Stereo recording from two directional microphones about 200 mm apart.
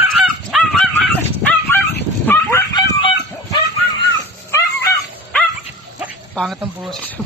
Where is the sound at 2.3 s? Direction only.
15° left (ahead or behind).